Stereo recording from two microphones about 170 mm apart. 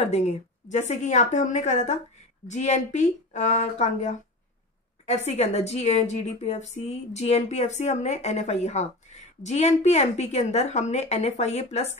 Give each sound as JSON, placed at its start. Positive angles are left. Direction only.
{"t": 0.0, "sound": "a woman's voice", "side_deg": 40}